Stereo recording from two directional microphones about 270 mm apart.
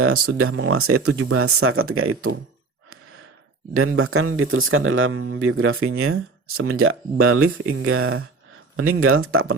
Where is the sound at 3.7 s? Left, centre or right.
Right.